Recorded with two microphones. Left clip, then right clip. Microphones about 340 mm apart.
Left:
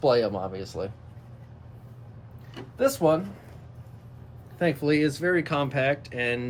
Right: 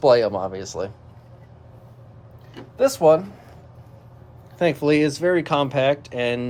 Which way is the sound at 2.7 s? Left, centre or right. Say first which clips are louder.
Right 7 dB; centre.